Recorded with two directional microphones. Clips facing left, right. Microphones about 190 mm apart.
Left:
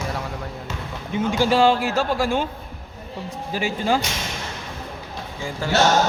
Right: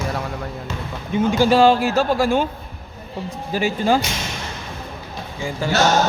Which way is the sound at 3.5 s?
40° right (ahead or behind).